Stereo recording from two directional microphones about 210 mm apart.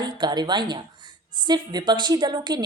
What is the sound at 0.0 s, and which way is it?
Speech, 20° right (ahead or behind).